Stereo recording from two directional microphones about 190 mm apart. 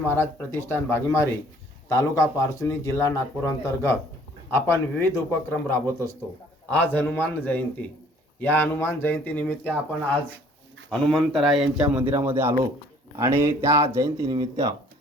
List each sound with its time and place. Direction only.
0.0 s speech: 10° left (ahead or behind)
11.0 s a man's voice: 5° left (ahead or behind); by 14.8 s 20° right (ahead or behind)